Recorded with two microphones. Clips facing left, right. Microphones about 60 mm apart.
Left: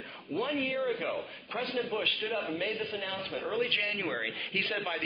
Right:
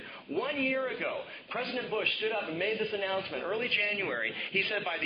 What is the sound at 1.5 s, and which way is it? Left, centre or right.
Speech, right.